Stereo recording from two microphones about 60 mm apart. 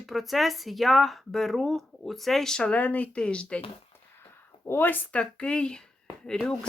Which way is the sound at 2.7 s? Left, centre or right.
Left.